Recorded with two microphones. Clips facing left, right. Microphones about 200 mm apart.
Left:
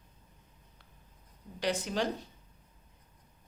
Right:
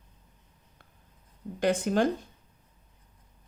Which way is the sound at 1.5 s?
50° right (ahead or behind).